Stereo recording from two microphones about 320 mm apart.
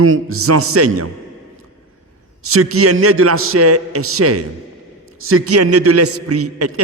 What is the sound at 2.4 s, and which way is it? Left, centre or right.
A man's voice, right.